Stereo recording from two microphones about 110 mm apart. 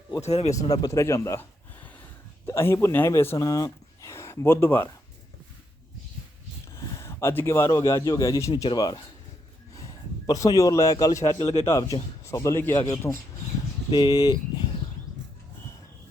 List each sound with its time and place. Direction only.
0.2 s speech: 75° left (ahead or behind)
0.7 s speech: 30° left (ahead or behind)
6.7 s a man's voice: 25° left (ahead or behind)
11.3 s speech: 65° left (ahead or behind)
11.6 s a man's voice: 30° left (ahead or behind)
13.9 s speech: 40° left (ahead or behind)